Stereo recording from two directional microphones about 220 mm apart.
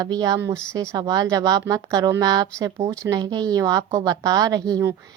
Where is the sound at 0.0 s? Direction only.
15° right (ahead or behind).